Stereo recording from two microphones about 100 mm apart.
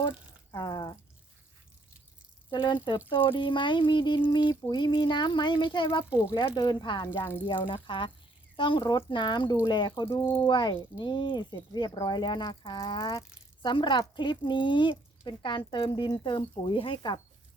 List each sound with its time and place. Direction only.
0.5 s speech: 45° left (ahead or behind)
2.5 s speech: 50° left (ahead or behind)
10.2 s speech: 60° left (ahead or behind)